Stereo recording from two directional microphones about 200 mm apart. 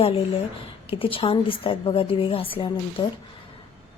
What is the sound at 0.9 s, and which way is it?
A woman's voice, 25° left (ahead or behind).